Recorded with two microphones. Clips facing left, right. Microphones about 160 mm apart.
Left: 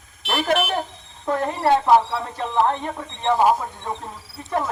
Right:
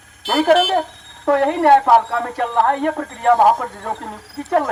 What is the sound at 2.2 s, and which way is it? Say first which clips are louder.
Speech: right 4 dB; 70° right (ahead or behind).